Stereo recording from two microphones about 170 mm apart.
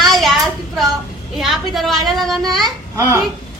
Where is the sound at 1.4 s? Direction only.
Centre (ahead or behind).